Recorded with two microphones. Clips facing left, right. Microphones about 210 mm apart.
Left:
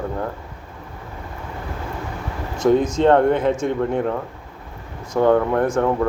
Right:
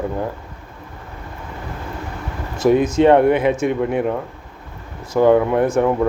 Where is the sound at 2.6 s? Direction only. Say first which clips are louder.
Right 2 dB; 5° right (ahead or behind).